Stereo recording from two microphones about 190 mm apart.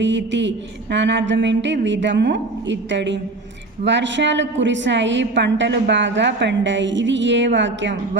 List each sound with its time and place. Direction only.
0.0 s a woman's voice: 70° right (ahead or behind)